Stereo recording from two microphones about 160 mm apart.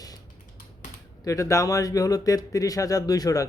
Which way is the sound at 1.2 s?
20° left (ahead or behind).